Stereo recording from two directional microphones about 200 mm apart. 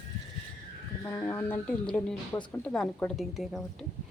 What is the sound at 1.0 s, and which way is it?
Speech, 15° left (ahead or behind).